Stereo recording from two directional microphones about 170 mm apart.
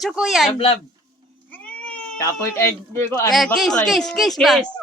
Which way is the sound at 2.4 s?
15° left (ahead or behind).